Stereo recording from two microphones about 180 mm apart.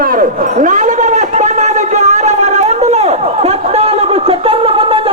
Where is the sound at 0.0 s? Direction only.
50° right (ahead or behind).